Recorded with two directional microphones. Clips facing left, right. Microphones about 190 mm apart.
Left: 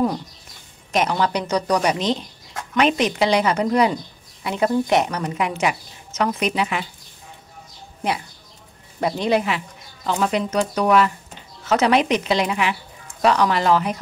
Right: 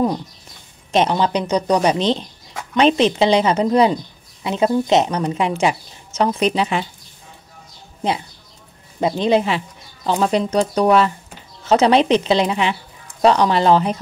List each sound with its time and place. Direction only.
0.9 s a woman's voice: 25° right (ahead or behind)
9.0 s a woman's voice: 20° right (ahead or behind)